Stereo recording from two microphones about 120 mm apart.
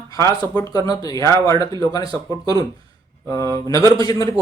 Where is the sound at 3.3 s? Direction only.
25° left (ahead or behind).